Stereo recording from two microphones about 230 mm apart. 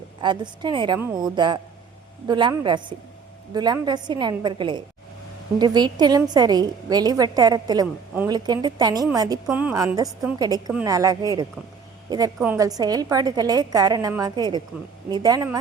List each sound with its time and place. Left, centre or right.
0.2 s a woman's voice: centre
9.5 s a woman's voice: centre